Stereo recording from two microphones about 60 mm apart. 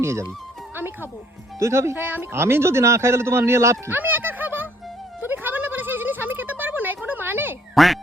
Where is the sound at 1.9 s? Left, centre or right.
Right.